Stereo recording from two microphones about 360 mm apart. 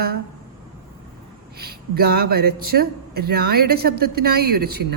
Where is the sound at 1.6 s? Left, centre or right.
Right.